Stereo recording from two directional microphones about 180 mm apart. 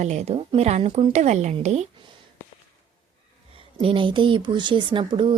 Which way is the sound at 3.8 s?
30° right (ahead or behind).